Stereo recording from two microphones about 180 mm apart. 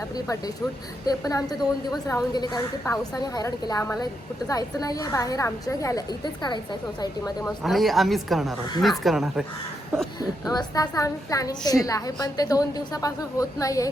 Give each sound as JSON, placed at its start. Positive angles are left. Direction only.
{"t": 1.0, "sound": "a woman's voice", "side_deg": 20}
{"t": 7.4, "sound": "a woman's voice", "side_deg": 0}
{"t": 10.2, "sound": "a woman's voice", "side_deg": 20}